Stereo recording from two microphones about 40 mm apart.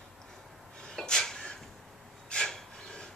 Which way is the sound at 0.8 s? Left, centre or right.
Centre.